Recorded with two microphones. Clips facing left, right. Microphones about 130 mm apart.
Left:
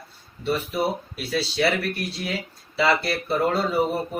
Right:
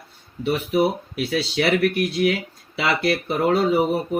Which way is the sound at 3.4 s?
70° right (ahead or behind).